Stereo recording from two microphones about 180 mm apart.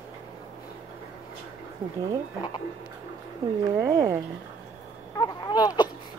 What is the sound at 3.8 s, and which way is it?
Speech, 15° right (ahead or behind).